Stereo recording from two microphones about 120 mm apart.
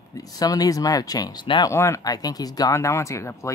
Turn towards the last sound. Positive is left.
turn(degrees=25)  # may be behind; listen again after turning